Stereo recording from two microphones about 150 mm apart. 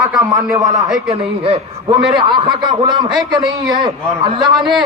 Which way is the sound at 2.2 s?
30° right (ahead or behind).